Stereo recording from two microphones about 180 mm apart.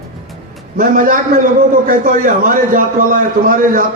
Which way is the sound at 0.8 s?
50° right (ahead or behind).